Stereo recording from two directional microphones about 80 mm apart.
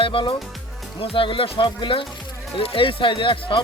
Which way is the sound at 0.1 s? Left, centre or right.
Left.